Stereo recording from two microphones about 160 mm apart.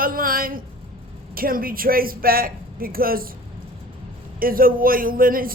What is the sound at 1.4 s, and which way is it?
Speech, 65° right (ahead or behind).